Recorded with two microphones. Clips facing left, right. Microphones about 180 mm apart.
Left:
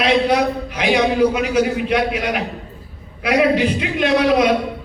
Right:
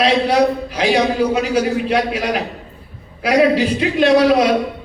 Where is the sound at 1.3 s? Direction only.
35° right (ahead or behind).